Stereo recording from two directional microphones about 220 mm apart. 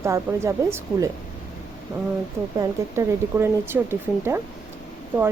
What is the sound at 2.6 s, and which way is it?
Speech, 10° right (ahead or behind).